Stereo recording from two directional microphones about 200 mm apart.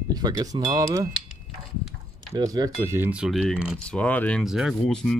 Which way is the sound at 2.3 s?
15° right (ahead or behind).